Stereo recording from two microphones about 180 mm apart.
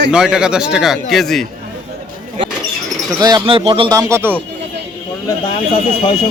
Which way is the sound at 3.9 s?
15° right (ahead or behind).